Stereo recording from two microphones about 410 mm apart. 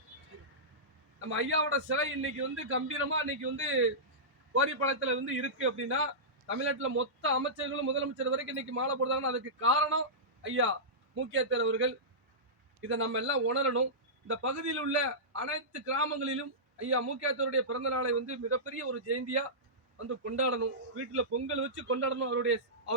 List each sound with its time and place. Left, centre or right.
1.2 s a man's voice: right
6.5 s a man's voice: right